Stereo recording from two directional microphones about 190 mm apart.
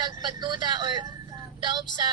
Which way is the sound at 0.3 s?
25° right (ahead or behind).